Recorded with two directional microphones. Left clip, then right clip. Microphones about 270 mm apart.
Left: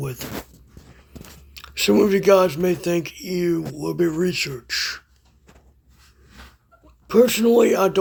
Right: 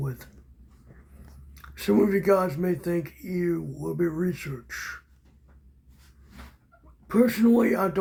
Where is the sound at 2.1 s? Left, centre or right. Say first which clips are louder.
Left 7 dB; left.